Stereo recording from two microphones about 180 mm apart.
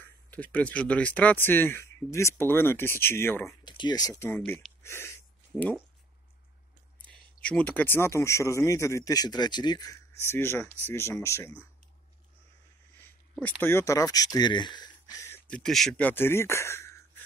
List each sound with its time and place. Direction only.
0.0 s speech: 10° left (ahead or behind)
3.6 s speech: 25° left (ahead or behind)
7.0 s speech: 5° left (ahead or behind)
13.6 s speech: 15° left (ahead or behind)
15.5 s speech: centre (ahead or behind)